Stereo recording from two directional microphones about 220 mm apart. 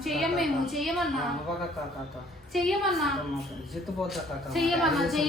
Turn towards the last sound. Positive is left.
turn(degrees=0)  # may be behind; listen again after turning